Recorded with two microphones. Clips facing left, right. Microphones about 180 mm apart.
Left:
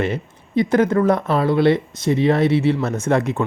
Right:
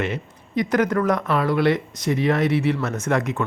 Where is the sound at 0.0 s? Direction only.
30° left (ahead or behind).